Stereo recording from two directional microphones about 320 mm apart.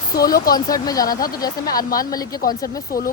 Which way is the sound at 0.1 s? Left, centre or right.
Left.